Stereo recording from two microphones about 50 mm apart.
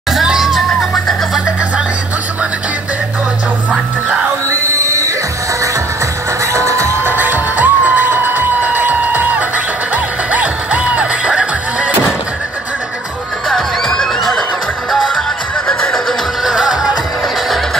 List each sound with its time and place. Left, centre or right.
0.1 s music: centre
4.5 s a sound: right
6.5 s music: right
7.1 s music: right
10.3 s music: right
13.5 s music: centre
16.4 s music: centre